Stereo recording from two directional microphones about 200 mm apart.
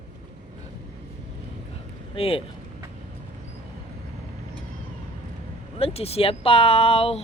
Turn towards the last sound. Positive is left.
turn(degrees=30)  # may be behind; listen again after turning